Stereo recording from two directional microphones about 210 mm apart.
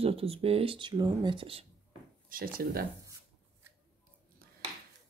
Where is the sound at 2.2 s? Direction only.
45° right (ahead or behind).